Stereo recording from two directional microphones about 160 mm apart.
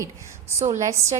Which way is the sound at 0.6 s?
50° right (ahead or behind).